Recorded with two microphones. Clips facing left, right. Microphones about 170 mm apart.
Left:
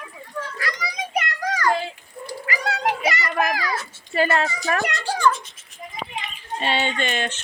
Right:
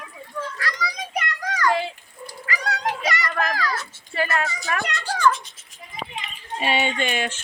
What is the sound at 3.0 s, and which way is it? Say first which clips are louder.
Speech: left 2 dB; 25° left (ahead or behind).